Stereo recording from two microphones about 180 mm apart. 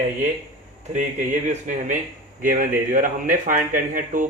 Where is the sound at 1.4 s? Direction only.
45° right (ahead or behind).